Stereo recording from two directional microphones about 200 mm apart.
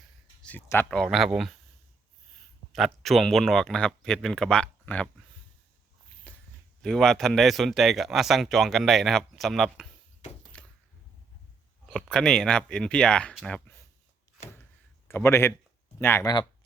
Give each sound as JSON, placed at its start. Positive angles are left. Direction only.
{"t": 0.4, "sound": "speech", "side_deg": 10}
{"t": 2.7, "sound": "speech", "side_deg": 0}
{"t": 6.8, "sound": "speech", "side_deg": 0}
{"t": 10.5, "sound": "a sound", "side_deg": 5}
{"t": 11.9, "sound": "speech", "side_deg": 5}
{"t": 15.0, "sound": "a man's voice", "side_deg": 10}